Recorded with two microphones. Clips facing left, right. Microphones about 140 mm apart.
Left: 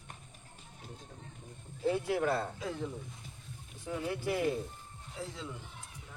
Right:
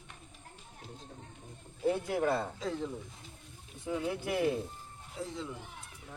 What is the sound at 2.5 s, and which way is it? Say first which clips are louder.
Speech: right 2 dB; 10° left (ahead or behind).